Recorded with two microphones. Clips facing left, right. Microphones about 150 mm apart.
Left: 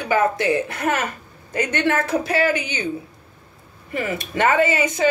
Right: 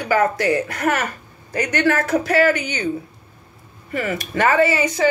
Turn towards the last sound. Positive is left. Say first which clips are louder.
# right 2 dB
turn(degrees=20)  # may be behind; listen again after turning